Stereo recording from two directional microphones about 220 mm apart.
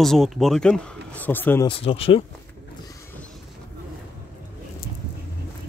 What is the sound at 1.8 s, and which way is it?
Speech, 25° left (ahead or behind).